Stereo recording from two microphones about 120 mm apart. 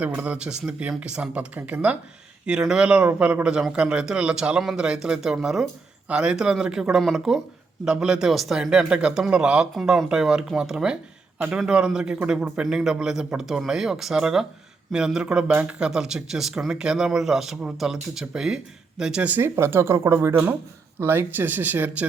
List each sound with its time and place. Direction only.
0.0 s speech: 10° right (ahead or behind)